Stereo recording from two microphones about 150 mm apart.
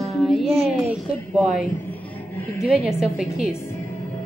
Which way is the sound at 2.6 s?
5° right (ahead or behind).